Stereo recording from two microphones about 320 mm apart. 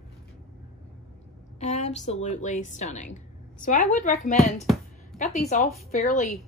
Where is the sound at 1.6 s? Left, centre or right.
Left.